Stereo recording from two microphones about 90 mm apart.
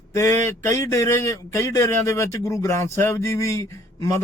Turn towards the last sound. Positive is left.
turn(degrees=35)  # may be behind; listen again after turning